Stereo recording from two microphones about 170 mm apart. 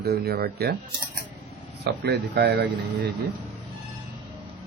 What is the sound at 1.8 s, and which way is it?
Speech, 75° right (ahead or behind).